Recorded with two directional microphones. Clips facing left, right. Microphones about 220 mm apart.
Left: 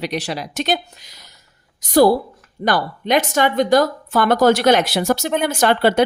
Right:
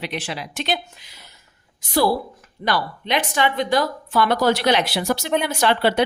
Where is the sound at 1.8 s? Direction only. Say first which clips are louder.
Left 7 dB; 45° left (ahead or behind).